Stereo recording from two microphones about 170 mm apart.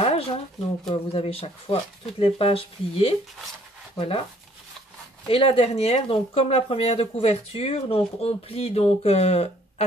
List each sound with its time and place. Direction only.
0.0 s a sound: 35° left (ahead or behind)
0.8 s speech: 35° left (ahead or behind)
5.3 s speech: 35° left (ahead or behind)